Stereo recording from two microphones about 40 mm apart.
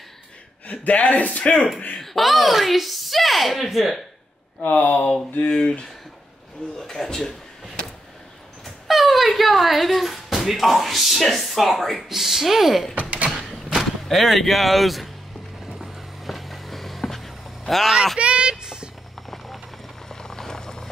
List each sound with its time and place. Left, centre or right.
0.7 s a man's voice: left
2.0 s a woman's voice: centre
4.6 s speech: left
5.4 s speech: left
6.8 s a man's voice: centre
7.2 s a sound: centre
10.4 s a woman's voice: centre
12.1 s speech: centre
13.3 s a sound: centre
13.7 s speech: centre
15.6 s vehicle: centre
18.2 s a sound: right
19.3 s a sound: centre
20.1 s vehicle: centre